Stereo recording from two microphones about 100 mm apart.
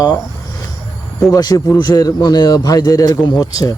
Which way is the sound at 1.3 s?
40° left (ahead or behind).